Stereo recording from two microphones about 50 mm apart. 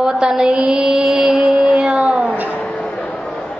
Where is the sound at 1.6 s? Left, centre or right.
Centre.